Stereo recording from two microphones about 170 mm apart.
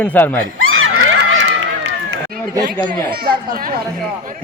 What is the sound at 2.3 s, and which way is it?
Chatter, 60° right (ahead or behind).